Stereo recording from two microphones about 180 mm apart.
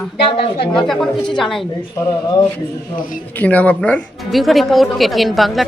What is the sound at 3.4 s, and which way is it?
Speech, 10° left (ahead or behind).